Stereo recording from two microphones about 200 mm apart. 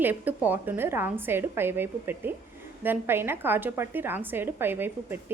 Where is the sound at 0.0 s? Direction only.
10° right (ahead or behind).